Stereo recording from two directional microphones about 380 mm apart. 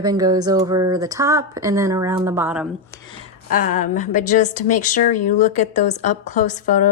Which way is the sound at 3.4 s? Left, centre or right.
Left.